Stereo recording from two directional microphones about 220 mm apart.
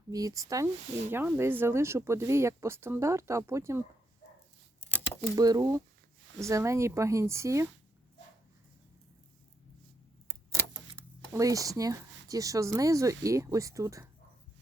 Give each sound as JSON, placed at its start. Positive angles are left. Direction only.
{"t": 0.1, "sound": "speech", "side_deg": -15}
{"t": 5.4, "sound": "speech", "side_deg": -15}
{"t": 10.5, "sound": "a sound", "side_deg": -10}
{"t": 13.2, "sound": "speech", "side_deg": -15}